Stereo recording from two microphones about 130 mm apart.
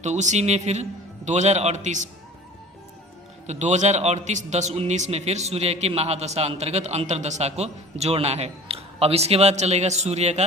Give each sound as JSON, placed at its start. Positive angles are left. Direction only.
{"t": 0.0, "sound": "a man's voice", "side_deg": -65}
{"t": 3.4, "sound": "a man's voice", "side_deg": -60}